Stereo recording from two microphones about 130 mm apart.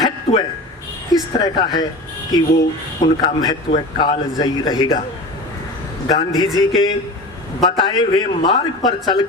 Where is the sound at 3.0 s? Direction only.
35° left (ahead or behind).